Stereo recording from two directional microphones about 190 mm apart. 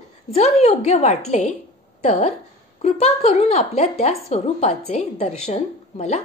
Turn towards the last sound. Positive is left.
turn(degrees=35)  # may be behind; listen again after turning